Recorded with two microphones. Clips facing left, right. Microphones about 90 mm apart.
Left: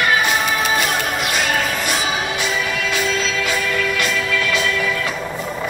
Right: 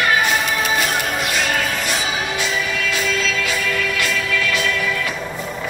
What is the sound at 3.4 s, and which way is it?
Music, 20° left (ahead or behind).